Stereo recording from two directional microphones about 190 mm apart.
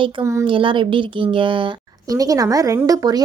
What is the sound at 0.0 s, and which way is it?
A woman's voice, 20° right (ahead or behind).